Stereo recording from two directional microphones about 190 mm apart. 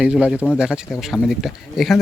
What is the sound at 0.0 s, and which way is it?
Speech, 5° right (ahead or behind).